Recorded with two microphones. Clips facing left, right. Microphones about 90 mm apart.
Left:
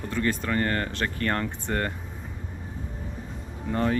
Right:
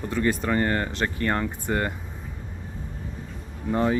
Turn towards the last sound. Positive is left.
turn(degrees=-10)  # may be behind; listen again after turning